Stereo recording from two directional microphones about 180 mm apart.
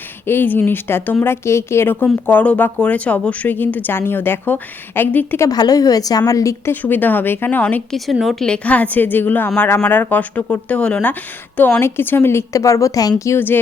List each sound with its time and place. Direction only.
0.3 s speech: 10° left (ahead or behind)